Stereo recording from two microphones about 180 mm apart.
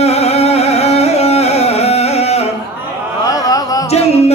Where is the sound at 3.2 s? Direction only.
20° left (ahead or behind).